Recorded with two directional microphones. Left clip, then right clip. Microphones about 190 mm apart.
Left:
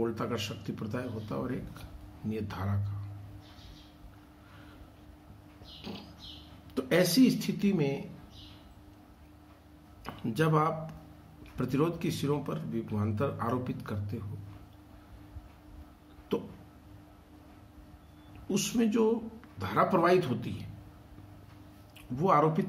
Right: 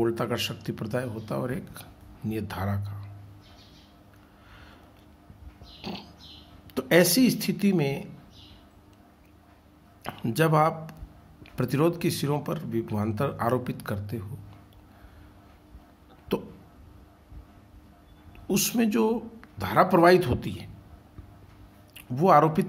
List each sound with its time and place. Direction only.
0.0 s speech: 55° right (ahead or behind)
5.8 s pig: 55° right (ahead or behind)
6.7 s speech: 60° right (ahead or behind)
10.0 s speech: 60° right (ahead or behind)
16.3 s a sound: 60° right (ahead or behind)
18.5 s speech: 60° right (ahead or behind)
21.9 s speech: 60° right (ahead or behind)